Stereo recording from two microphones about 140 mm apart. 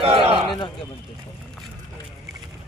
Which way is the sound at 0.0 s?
45° right (ahead or behind).